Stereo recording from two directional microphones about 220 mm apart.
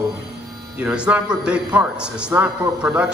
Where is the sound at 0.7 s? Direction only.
5° right (ahead or behind).